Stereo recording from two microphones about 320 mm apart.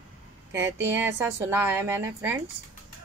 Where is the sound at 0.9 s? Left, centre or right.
Centre.